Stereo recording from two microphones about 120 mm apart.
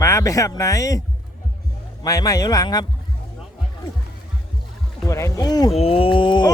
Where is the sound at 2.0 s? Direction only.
30° left (ahead or behind).